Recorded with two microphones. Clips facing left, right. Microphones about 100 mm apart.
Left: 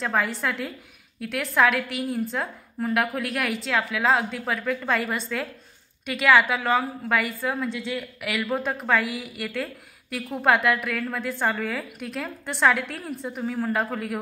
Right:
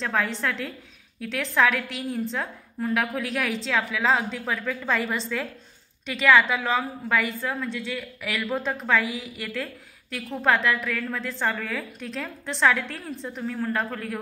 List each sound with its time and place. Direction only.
0.0 s a woman's voice: 10° left (ahead or behind)
7.6 s a woman's voice: 15° left (ahead or behind)